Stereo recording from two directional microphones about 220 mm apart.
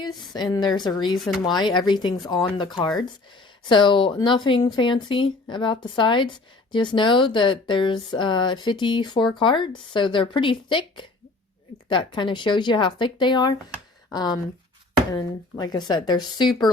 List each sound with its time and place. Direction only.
0.0 s speech: 20° left (ahead or behind)